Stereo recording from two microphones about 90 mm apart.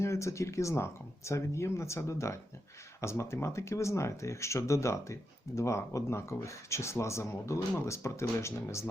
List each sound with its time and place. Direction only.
0.0 s speech: 30° left (ahead or behind)